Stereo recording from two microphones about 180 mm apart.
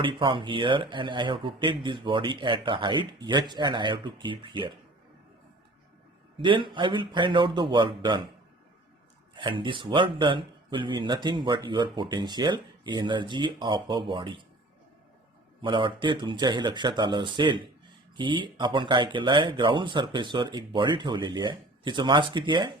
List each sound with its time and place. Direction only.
0.0 s speech: 25° right (ahead or behind)
6.4 s speech: 25° right (ahead or behind)
9.3 s speech: 25° right (ahead or behind)
15.6 s speech: 25° right (ahead or behind)